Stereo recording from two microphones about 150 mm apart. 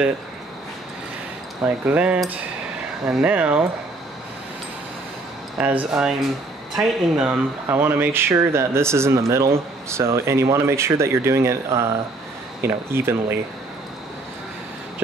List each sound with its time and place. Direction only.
1.9 s speech: 10° right (ahead or behind)
5.6 s speech: 10° right (ahead or behind)